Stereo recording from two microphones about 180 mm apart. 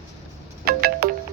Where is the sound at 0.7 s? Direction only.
60° right (ahead or behind).